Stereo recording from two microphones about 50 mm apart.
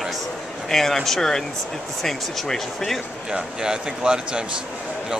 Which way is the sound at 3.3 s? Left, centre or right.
Centre.